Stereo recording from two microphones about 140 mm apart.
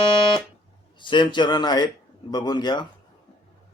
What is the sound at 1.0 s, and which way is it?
Speech, 35° left (ahead or behind).